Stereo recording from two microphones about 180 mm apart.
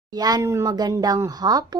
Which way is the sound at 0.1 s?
20° right (ahead or behind).